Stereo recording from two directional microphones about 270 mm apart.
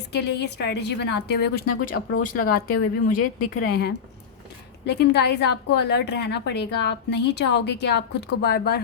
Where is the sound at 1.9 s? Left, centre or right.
Left.